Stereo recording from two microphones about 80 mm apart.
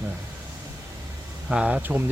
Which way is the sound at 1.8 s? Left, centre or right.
Right.